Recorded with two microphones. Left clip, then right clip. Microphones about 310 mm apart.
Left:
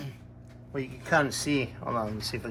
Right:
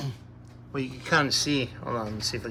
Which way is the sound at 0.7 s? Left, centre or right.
Centre.